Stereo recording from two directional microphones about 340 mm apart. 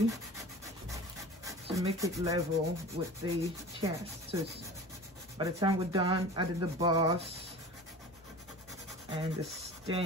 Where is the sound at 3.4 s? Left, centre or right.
Centre.